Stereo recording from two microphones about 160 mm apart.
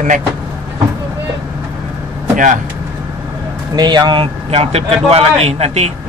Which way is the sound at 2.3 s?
55° right (ahead or behind).